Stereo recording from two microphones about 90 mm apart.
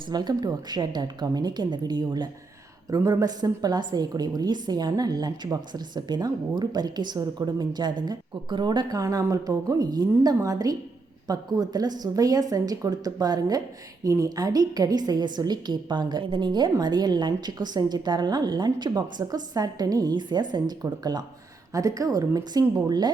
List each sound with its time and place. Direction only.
0.1 s a woman's voice: 50° right (ahead or behind)
22.7 s a woman's voice: 50° right (ahead or behind)